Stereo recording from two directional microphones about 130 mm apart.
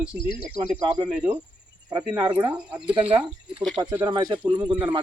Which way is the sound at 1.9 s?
30° right (ahead or behind).